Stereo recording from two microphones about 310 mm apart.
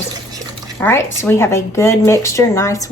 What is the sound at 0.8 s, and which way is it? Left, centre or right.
A woman's voice, centre.